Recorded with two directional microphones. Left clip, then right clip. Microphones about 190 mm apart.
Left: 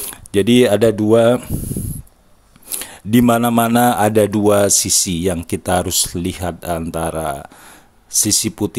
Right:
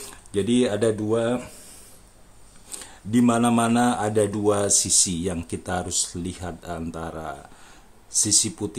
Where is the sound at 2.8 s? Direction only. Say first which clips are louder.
Left 7 dB; 45° left (ahead or behind).